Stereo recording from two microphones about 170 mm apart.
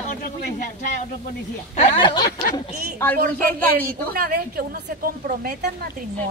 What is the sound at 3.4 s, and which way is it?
A woman's voice, 60° right (ahead or behind).